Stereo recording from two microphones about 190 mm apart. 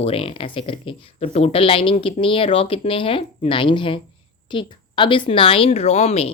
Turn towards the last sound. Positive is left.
turn(degrees=35)  # may be behind; listen again after turning